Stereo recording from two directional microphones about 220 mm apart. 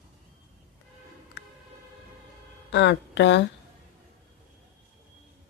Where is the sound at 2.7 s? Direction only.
55° left (ahead or behind).